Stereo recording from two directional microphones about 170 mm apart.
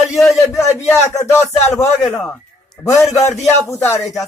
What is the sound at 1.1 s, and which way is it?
Speech, 15° left (ahead or behind).